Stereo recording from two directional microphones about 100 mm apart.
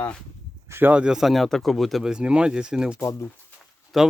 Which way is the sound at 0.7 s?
20° right (ahead or behind).